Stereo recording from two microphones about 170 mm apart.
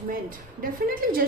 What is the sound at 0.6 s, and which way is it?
Speech, 55° right (ahead or behind).